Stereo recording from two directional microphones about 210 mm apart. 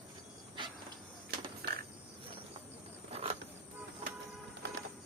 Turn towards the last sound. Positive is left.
turn(degrees=-30)  # may be behind; listen again after turning